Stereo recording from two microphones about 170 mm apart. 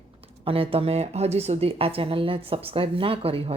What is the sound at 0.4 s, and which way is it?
A woman's voice, 35° right (ahead or behind).